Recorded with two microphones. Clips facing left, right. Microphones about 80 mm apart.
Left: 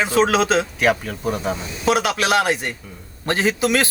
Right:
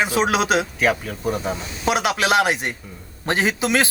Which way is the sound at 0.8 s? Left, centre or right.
Centre.